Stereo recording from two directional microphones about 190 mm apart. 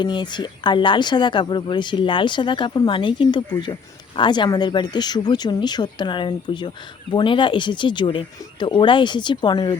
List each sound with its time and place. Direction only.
0.0 s speech: 25° left (ahead or behind)